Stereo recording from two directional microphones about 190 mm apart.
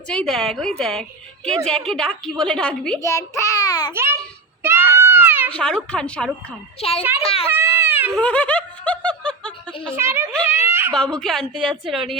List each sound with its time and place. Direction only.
0.1 s a woman's voice: 5° left (ahead or behind)
3.0 s a child's voice: 15° left (ahead or behind)
3.9 s a woman's voice: 10° right (ahead or behind)
4.6 s a sound: 10° right (ahead or behind)
5.5 s a woman's voice: 5° left (ahead or behind)
6.7 s a child's voice: 30° left (ahead or behind)
7.5 s baby cry: 10° right (ahead or behind)
8.1 s snicker: 5° left (ahead or behind)
9.9 s a woman's voice: 15° right (ahead or behind)
10.9 s a woman's voice: 5° left (ahead or behind)